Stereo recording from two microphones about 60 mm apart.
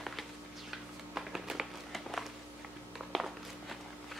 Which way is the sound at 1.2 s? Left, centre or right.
Centre.